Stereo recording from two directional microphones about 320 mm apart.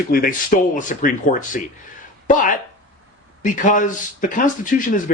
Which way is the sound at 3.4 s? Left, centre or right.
Left.